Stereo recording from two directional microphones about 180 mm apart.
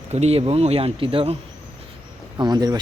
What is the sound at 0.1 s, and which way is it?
Speech, 35° right (ahead or behind).